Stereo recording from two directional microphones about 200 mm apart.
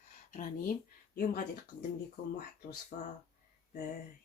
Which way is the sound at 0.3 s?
40° left (ahead or behind).